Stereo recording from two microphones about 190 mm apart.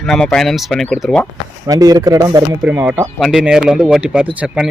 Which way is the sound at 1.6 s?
20° right (ahead or behind).